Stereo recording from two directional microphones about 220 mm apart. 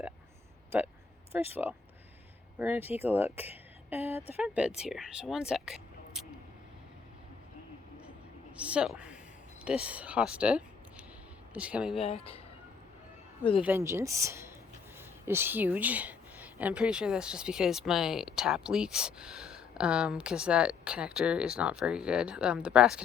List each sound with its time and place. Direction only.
1.3 s speech: 10° right (ahead or behind)
8.5 s a woman's voice: 5° right (ahead or behind)
11.9 s speech: 25° left (ahead or behind)
13.6 s speech: 10° right (ahead or behind)